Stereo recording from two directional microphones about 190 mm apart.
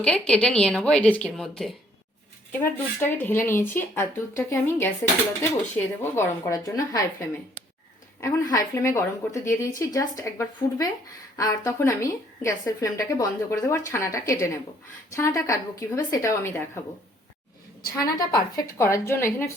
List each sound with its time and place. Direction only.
0.0 s speech: 5° left (ahead or behind)
3.0 s a woman's voice: 10° left (ahead or behind)
18.2 s a woman's voice: 20° left (ahead or behind)